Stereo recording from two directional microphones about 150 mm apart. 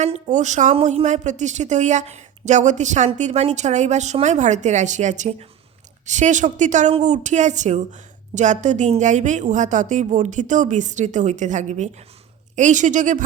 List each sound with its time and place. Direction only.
0.0 s speech: 50° right (ahead or behind)